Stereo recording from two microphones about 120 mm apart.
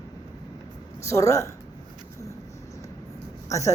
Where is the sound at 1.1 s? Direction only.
25° left (ahead or behind).